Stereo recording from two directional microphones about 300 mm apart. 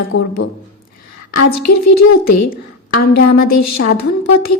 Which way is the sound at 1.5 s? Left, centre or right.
Left.